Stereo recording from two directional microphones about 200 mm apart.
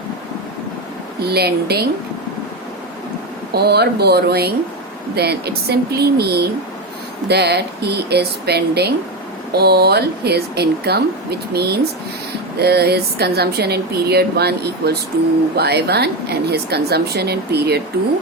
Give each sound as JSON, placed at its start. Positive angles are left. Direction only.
{"t": 1.2, "sound": "speech", "side_deg": -55}
{"t": 3.5, "sound": "a woman's voice", "side_deg": -55}